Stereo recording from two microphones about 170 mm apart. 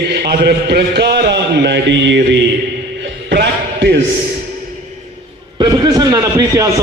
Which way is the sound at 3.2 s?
90° right.